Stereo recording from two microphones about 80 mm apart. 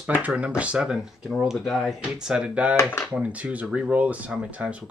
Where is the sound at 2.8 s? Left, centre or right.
Left.